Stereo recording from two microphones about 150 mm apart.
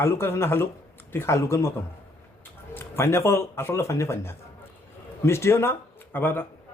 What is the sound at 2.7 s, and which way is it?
Speech, 15° left (ahead or behind).